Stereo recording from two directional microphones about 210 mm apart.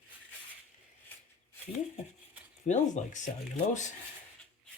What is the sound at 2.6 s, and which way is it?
Speech, 35° left (ahead or behind).